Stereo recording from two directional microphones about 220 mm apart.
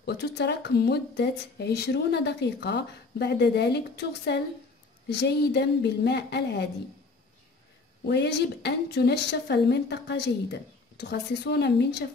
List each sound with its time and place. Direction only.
0.0 s speech: 50° left (ahead or behind)
8.0 s speech: 50° left (ahead or behind)